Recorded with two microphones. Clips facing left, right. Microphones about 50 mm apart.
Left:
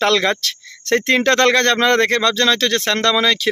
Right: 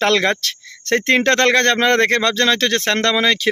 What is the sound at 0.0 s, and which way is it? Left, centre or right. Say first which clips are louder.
Speech: even; right.